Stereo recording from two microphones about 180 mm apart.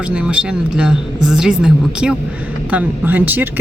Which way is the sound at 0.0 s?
5° right (ahead or behind).